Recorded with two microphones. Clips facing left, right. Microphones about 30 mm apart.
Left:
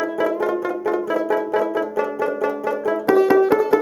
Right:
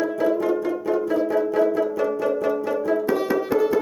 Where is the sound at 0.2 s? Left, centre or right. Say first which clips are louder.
Left 1 dB; left.